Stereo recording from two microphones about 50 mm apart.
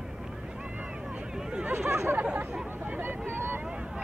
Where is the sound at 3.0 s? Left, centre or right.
Right.